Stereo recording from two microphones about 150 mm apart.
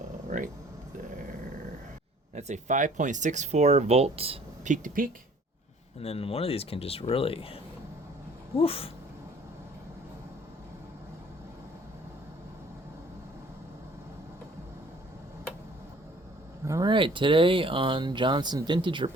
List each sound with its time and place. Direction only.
0.3 s speech: 60° right (ahead or behind)
2.3 s speech: 55° right (ahead or behind)
4.6 s speech: 60° right (ahead or behind)
6.0 s speech: 40° left (ahead or behind)
8.5 s speech: 40° left (ahead or behind)
16.6 s speech: 20° right (ahead or behind)
16.9 s speech: 35° right (ahead or behind)